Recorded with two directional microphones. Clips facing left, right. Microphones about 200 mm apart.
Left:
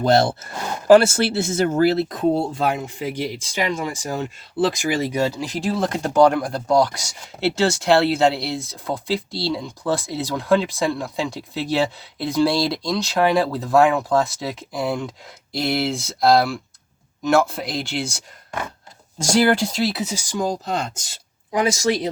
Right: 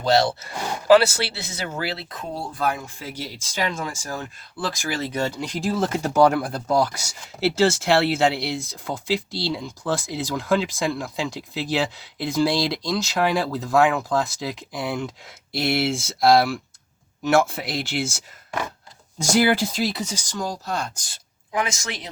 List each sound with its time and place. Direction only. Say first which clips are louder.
0.0 s speech: left 3 dB; 50° left (ahead or behind)
2.3 s speech: left 5 dB; 25° left (ahead or behind); by 18.2 s 5° right (ahead or behind)
19.2 s speech: left 2 dB; centre (ahead or behind); by 21.0 s 20° left (ahead or behind)
21.5 s speech: left 8 dB; 35° left (ahead or behind)